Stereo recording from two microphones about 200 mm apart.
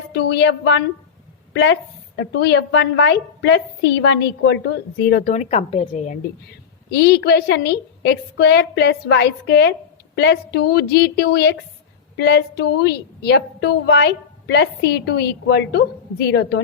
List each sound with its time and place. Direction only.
0.1 s a woman's voice: 55° left (ahead or behind)
5.2 s a woman's voice: 35° left (ahead or behind)
6.5 s a woman's voice: 55° left (ahead or behind)